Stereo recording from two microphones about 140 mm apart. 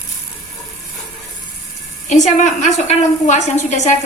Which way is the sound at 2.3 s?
60° left (ahead or behind).